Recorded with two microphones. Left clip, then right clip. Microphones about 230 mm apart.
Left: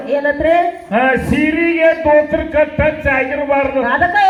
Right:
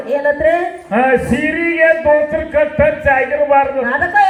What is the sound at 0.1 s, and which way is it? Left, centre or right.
Speech, left.